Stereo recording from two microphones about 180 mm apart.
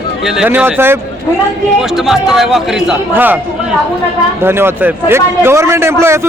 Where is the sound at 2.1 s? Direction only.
Centre (ahead or behind).